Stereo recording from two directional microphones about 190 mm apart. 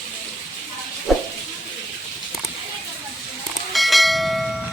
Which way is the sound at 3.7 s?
Centre (ahead or behind).